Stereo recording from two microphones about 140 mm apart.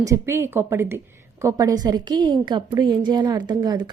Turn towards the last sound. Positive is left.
turn(degrees=-30)  # may be behind; listen again after turning